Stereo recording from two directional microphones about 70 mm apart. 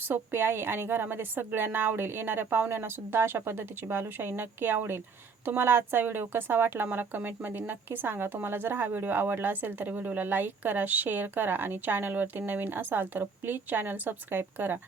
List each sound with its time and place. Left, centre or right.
0.0 s a woman's voice: right